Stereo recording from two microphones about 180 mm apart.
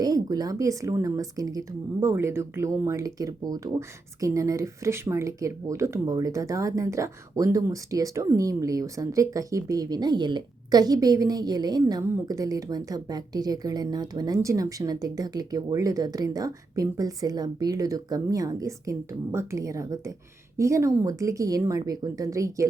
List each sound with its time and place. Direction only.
0.0 s speech: 20° right (ahead or behind)